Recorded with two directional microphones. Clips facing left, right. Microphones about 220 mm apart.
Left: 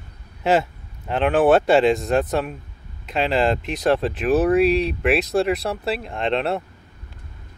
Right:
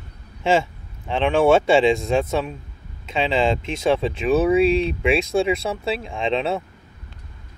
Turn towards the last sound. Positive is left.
turn(degrees=0)  # may be behind; listen again after turning